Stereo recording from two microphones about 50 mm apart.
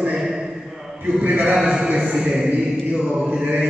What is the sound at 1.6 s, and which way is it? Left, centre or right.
Speech, centre.